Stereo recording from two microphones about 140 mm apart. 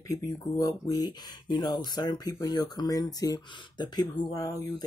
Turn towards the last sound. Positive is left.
turn(degrees=25)  # may be behind; listen again after turning